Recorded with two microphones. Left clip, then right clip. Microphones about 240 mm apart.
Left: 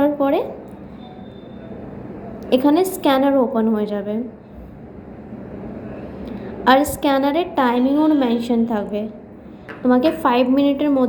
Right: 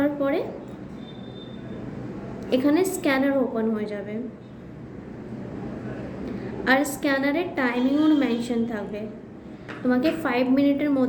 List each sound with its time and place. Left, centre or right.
0.0 s a sound: centre
2.5 s a woman's voice: centre
6.7 s a woman's voice: centre